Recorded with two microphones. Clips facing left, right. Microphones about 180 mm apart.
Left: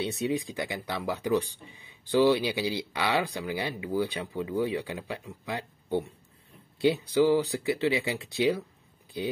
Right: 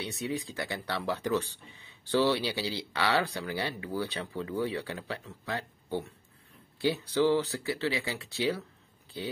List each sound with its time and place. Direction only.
0.0 s speech: 20° left (ahead or behind)